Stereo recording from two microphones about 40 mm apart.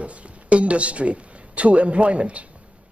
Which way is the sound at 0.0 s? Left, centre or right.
Right.